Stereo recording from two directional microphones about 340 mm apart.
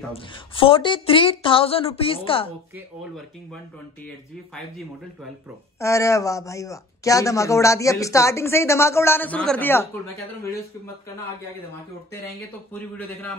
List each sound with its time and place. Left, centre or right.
0.1 s speech: centre
5.8 s speech: centre
12.7 s a man's voice: centre